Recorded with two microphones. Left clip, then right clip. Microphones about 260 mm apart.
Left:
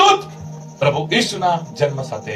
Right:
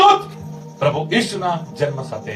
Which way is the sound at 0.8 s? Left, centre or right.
Left.